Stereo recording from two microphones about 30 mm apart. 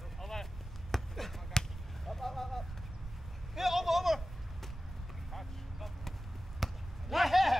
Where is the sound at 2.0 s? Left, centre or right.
Centre.